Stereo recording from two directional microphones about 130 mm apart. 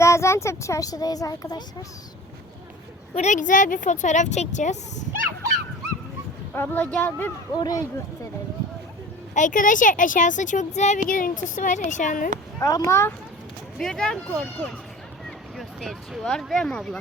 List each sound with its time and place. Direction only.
0.0 s a child's voice: 20° left (ahead or behind)
3.2 s speech: 70° left (ahead or behind)
6.5 s speech: 15° left (ahead or behind)
7.5 s a child's voice: 30° left (ahead or behind)
9.3 s speech: 80° left
11.1 s speech: 85° left
12.5 s a child's voice: 25° left (ahead or behind)
13.7 s speech: 5° left (ahead or behind)